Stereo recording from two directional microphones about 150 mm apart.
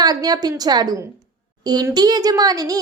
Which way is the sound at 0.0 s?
25° right (ahead or behind).